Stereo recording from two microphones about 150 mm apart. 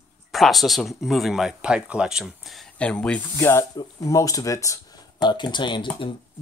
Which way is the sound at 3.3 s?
15° left (ahead or behind).